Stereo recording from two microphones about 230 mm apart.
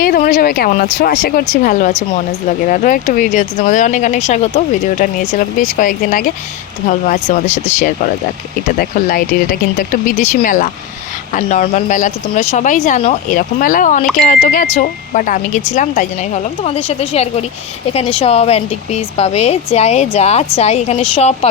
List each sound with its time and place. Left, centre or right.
0.0 s speech: left